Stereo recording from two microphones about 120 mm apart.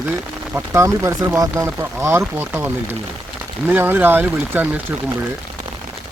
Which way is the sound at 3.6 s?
15° right (ahead or behind).